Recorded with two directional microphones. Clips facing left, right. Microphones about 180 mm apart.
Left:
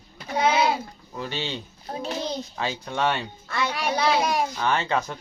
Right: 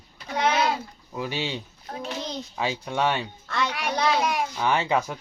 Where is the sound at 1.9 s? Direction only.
30° left (ahead or behind).